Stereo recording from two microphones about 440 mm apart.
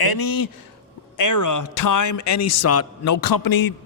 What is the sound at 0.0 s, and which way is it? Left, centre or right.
A man's voice, left.